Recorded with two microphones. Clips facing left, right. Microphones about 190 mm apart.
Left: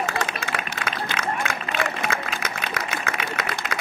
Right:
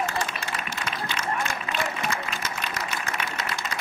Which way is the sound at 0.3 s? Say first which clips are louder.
Left 3 dB; 60° left (ahead or behind).